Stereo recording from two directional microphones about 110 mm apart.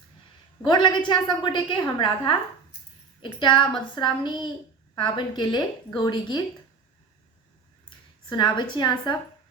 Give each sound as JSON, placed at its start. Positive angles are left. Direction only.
{"t": 0.6, "sound": "a woman's voice", "side_deg": 45}
{"t": 7.9, "sound": "speech", "side_deg": 45}